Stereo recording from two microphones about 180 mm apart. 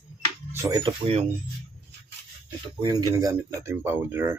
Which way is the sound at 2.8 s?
20° right (ahead or behind).